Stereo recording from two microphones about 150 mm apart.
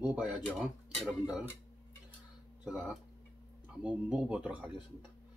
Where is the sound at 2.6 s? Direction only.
5° right (ahead or behind).